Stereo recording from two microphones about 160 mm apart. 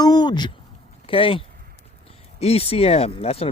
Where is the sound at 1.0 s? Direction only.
35° left (ahead or behind).